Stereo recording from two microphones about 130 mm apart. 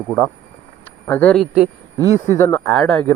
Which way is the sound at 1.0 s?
15° left (ahead or behind).